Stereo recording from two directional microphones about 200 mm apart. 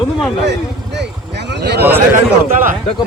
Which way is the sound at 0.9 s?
60° right (ahead or behind).